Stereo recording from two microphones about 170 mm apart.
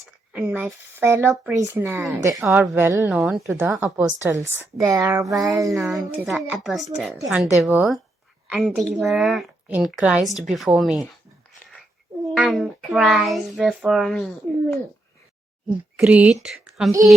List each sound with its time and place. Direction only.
0.3 s speech: 10° right (ahead or behind)
2.0 s speech: centre (ahead or behind)
2.2 s speech: 15° right (ahead or behind)
5.3 s a sound: 20° right (ahead or behind)
5.7 s speech: centre (ahead or behind)
12.4 s speech: centre (ahead or behind)
16.0 s speech: 10° right (ahead or behind)